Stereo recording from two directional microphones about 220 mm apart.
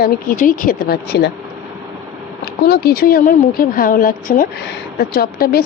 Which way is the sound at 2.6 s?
45° left (ahead or behind).